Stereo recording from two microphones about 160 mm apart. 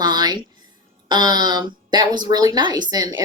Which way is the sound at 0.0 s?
25° right (ahead or behind).